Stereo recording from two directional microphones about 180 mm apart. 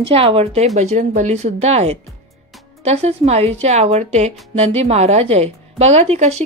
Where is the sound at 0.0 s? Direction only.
30° right (ahead or behind).